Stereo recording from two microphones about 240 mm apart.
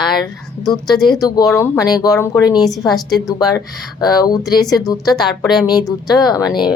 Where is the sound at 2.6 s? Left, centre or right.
Centre.